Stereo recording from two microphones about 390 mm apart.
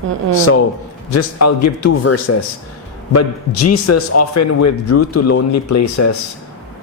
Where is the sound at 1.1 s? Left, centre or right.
Left.